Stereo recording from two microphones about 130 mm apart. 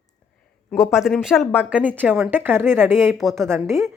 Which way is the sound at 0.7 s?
5° right (ahead or behind).